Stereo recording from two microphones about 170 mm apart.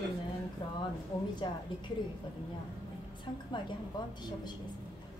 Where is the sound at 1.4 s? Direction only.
25° left (ahead or behind).